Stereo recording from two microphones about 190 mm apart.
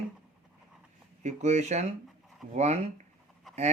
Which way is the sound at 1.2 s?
35° right (ahead or behind).